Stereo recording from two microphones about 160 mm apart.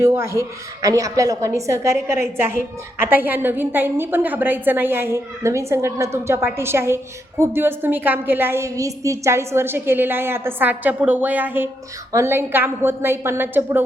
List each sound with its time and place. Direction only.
0.0 s a woman's voice: 15° right (ahead or behind)